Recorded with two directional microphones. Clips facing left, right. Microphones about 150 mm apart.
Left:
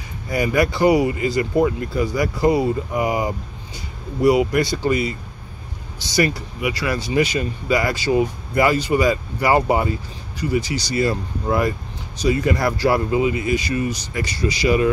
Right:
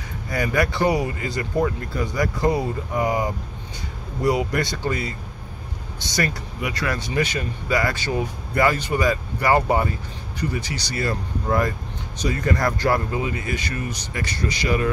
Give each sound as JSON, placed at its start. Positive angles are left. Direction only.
{"t": 0.3, "sound": "speech", "side_deg": 15}
{"t": 6.1, "sound": "speech", "side_deg": 5}